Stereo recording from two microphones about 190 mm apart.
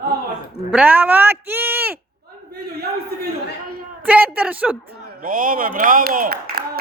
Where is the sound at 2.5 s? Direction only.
60° right (ahead or behind).